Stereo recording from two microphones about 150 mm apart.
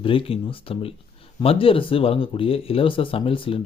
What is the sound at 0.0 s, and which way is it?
Speech, 35° left (ahead or behind).